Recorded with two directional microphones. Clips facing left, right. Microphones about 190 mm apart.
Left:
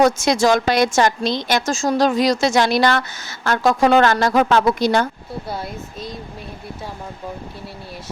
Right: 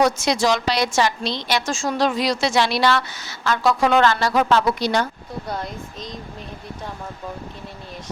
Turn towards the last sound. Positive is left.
turn(degrees=5)  # may be behind; listen again after turning